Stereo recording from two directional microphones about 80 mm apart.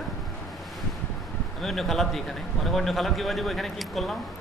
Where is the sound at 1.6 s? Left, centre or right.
Centre.